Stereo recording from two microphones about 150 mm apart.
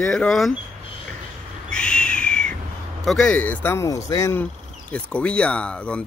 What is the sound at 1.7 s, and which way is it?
Owl, 5° left (ahead or behind).